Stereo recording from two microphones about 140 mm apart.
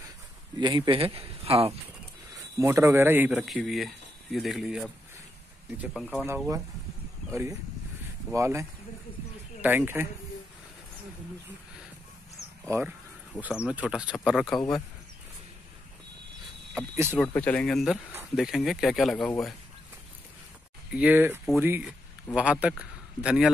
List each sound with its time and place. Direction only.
0.6 s speech: 30° right (ahead or behind)
2.6 s speech: 20° right (ahead or behind)
3.3 s speech: 5° right (ahead or behind)
5.9 s speech: 5° left (ahead or behind)
6.2 s speech: 15° right (ahead or behind)
8.3 s speech: 20° right (ahead or behind)
13.4 s speech: 5° right (ahead or behind)
16.9 s speech: 15° right (ahead or behind)
17.3 s speech: 10° left (ahead or behind)
20.9 s speech: 10° right (ahead or behind)
21.8 s a man's voice: 5° right (ahead or behind)